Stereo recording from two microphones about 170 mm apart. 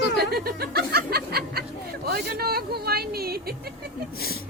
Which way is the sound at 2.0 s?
65° right (ahead or behind).